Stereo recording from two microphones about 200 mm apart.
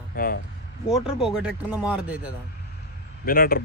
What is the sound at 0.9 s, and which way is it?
Speech, 5° right (ahead or behind).